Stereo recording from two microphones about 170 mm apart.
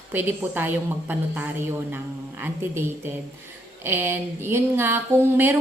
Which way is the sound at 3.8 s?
15° right (ahead or behind).